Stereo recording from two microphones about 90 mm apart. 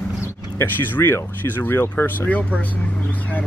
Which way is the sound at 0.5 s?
25° left (ahead or behind).